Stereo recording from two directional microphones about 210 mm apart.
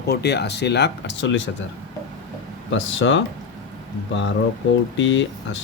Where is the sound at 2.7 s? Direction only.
60° left (ahead or behind).